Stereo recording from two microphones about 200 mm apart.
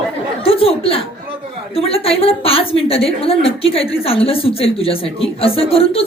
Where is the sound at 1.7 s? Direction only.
30° left (ahead or behind).